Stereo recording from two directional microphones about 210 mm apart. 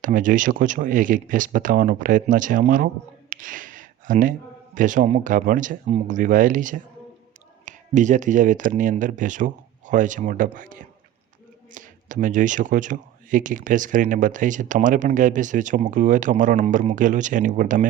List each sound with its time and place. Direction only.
0.0 s speech: 40° right (ahead or behind)